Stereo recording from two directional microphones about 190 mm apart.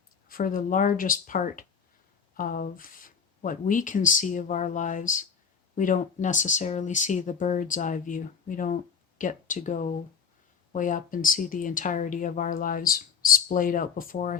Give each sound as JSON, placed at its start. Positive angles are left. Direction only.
{"t": 0.3, "sound": "speech", "side_deg": 45}